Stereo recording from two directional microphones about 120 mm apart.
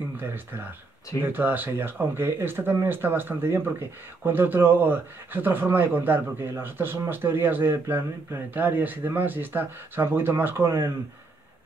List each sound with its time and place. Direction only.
0.2 s speech: 15° right (ahead or behind)